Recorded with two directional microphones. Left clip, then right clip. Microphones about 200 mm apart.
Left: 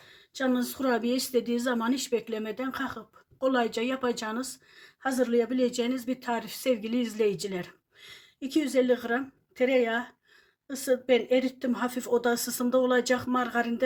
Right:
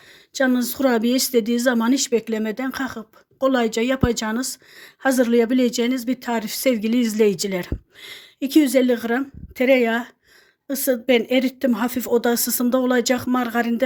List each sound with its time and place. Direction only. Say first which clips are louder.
0.3 s a woman's voice: right 8 dB; 40° right (ahead or behind)